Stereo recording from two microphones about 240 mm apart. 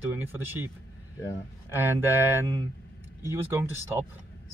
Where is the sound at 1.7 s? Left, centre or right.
Centre.